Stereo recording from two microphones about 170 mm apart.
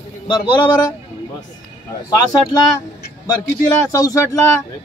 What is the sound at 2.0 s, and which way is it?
Speech, 20° left (ahead or behind).